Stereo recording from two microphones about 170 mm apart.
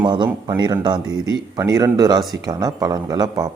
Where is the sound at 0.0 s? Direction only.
25° right (ahead or behind).